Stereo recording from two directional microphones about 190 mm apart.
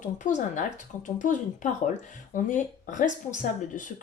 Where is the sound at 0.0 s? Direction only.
40° left (ahead or behind).